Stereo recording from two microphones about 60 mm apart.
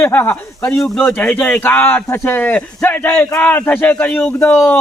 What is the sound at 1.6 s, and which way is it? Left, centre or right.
A man's voice, left.